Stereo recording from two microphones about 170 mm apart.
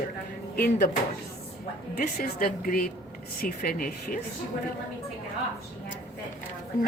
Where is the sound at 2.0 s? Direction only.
60° left (ahead or behind).